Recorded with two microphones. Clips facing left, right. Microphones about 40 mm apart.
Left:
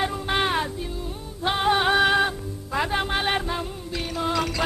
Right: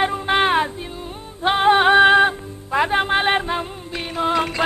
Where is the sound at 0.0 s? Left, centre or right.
Right.